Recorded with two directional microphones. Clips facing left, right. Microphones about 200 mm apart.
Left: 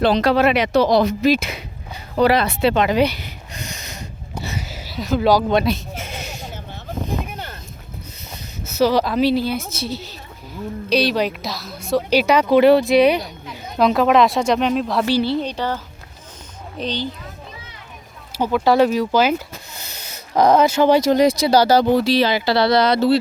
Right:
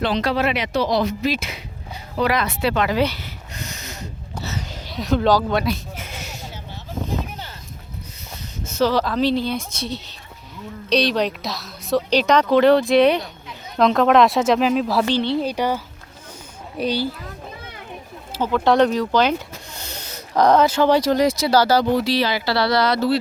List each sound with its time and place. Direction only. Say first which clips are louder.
0.0 s speech: left 5 dB; 40° left (ahead or behind)
0.3 s speech: left 5 dB; 55° left (ahead or behind)
2.1 s speech: left 5 dB; 30° left (ahead or behind); by 3.9 s 15° left (ahead or behind)
4.4 s bleat: left 1 dB; 10° left (ahead or behind)
8.6 s a woman's voice: left 2 dB; 10° left (ahead or behind); by 17.2 s 10° right (ahead or behind)
18.3 s speech: left 1 dB; 10° left (ahead or behind)